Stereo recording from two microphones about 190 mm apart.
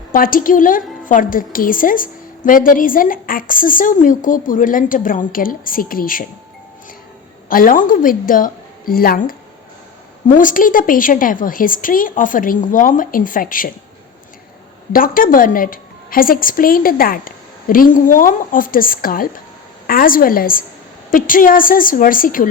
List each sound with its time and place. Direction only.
0.1 s a woman's voice: 45° left (ahead or behind)
7.5 s a woman's voice: 45° left (ahead or behind)
14.9 s a woman's voice: 50° left (ahead or behind)